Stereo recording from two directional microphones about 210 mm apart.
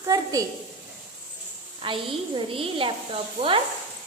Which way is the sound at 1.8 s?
25° right (ahead or behind).